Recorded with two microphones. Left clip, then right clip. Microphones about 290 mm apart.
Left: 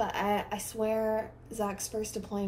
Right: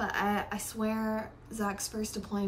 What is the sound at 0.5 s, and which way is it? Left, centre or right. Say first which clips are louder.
Speech: left 4 dB; centre.